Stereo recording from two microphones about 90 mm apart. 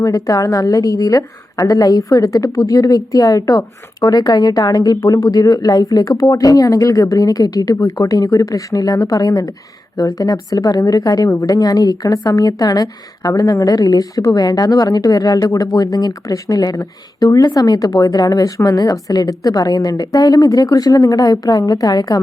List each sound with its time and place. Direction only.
0.0 s a woman's voice: 40° left (ahead or behind)